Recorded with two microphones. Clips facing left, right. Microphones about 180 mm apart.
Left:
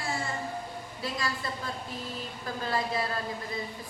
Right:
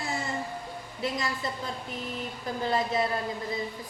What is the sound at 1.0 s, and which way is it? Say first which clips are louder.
A woman's voice: right 3 dB; 20° right (ahead or behind).